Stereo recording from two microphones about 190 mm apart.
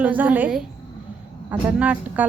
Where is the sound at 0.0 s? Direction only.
10° right (ahead or behind).